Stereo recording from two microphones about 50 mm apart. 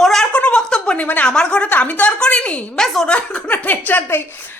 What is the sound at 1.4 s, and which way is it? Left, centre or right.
A woman's voice, left.